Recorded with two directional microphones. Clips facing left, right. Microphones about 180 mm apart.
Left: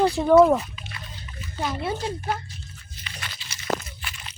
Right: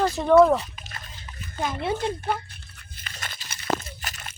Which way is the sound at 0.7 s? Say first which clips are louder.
Left 2 dB; 45° right (ahead or behind).